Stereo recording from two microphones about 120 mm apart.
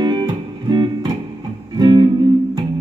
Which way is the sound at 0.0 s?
35° right (ahead or behind).